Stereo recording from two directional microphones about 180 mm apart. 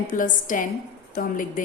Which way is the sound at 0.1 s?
50° left (ahead or behind).